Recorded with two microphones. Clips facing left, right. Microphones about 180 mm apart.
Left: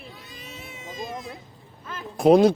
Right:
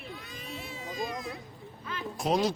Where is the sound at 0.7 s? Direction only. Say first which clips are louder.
Left 1 dB; 20° left (ahead or behind).